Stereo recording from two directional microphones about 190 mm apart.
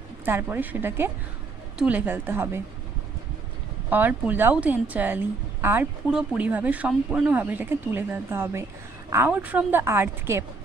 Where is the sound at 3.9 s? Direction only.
10° right (ahead or behind).